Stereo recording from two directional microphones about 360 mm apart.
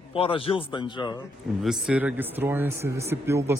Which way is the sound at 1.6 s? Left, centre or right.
Centre.